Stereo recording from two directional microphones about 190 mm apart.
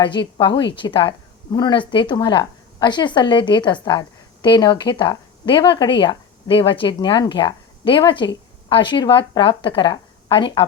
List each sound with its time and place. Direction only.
0.0 s speech: 25° left (ahead or behind)